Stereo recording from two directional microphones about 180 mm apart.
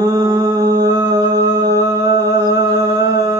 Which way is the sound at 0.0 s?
20° right (ahead or behind).